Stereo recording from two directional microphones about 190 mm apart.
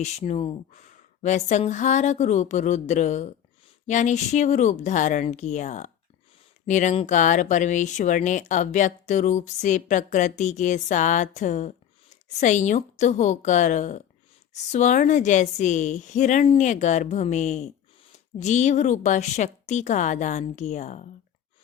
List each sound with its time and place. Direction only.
0.0 s speech: 35° left (ahead or behind)